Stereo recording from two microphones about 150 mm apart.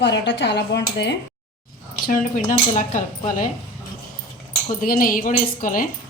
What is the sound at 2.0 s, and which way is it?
A woman's voice, 60° left (ahead or behind).